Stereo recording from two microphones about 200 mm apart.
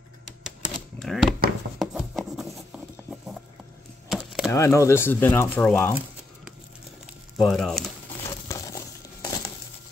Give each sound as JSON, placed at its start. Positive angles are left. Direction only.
{"t": 0.9, "sound": "speech", "side_deg": 0}
{"t": 1.8, "sound": "a sound", "side_deg": 0}
{"t": 4.1, "sound": "a sound", "side_deg": 0}
{"t": 4.5, "sound": "speech", "side_deg": 15}
{"t": 7.3, "sound": "speech", "side_deg": 0}
{"t": 8.5, "sound": "crumpling", "side_deg": 15}